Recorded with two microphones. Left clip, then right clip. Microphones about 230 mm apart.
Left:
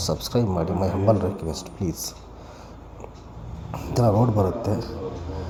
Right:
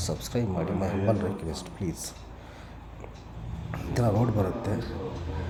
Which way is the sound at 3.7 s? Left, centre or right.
Centre.